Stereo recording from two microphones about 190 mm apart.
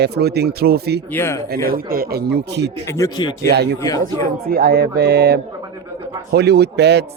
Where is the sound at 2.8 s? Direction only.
15° left (ahead or behind).